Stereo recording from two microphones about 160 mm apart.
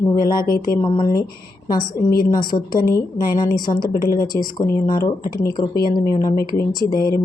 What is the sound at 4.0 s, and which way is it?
Speech, 65° left (ahead or behind).